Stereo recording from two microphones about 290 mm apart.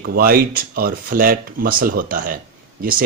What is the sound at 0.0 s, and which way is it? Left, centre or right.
Speech, right.